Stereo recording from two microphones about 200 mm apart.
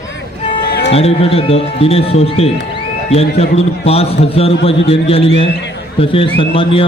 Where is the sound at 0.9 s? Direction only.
30° left (ahead or behind).